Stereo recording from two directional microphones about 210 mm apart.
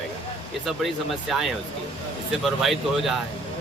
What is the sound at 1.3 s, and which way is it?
Speech, centre (ahead or behind).